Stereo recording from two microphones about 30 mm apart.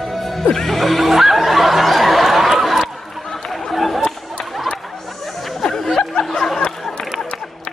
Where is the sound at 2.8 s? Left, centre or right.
Centre.